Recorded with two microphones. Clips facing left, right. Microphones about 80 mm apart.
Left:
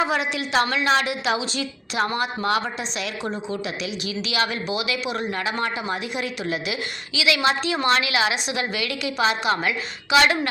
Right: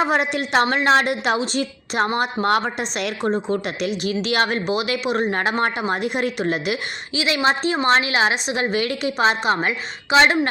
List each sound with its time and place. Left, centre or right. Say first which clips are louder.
0.1 s a woman's voice: right 3 dB; right
7.2 s a woman's voice: right 1 dB; right